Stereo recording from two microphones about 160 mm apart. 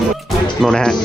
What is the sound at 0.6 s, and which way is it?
Speech, 5° left (ahead or behind).